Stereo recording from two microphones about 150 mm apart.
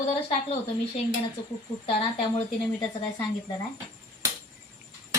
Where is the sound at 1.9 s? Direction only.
40° left (ahead or behind).